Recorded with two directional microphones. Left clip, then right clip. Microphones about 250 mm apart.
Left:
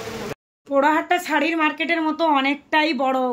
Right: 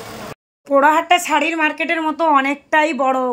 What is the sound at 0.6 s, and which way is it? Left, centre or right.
Speech, centre.